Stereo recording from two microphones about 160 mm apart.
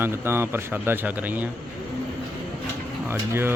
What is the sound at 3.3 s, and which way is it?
Speech, 15° right (ahead or behind).